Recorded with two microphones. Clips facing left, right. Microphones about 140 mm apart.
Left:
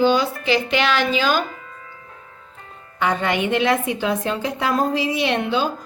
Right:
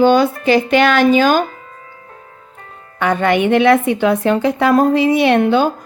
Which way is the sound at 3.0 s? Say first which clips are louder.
Right 6 dB; 55° right (ahead or behind).